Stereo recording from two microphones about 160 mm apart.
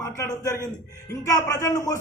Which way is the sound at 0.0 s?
20° left (ahead or behind).